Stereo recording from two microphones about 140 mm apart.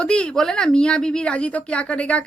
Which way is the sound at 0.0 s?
5° left (ahead or behind).